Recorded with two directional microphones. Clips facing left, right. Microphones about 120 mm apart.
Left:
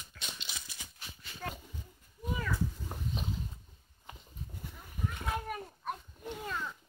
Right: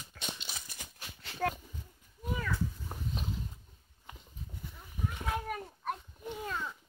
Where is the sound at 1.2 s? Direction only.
75° right (ahead or behind).